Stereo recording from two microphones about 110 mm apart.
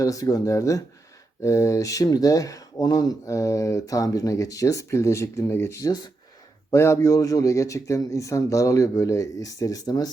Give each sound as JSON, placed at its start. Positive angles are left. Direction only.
{"t": 0.0, "sound": "a man's voice", "side_deg": 30}